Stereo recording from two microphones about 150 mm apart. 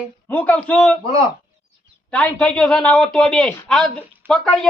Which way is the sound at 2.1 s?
10° left (ahead or behind).